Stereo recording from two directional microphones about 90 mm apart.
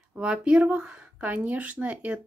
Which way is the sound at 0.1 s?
10° right (ahead or behind).